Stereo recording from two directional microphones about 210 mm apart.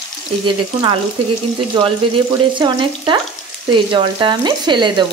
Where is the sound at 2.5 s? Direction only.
20° right (ahead or behind).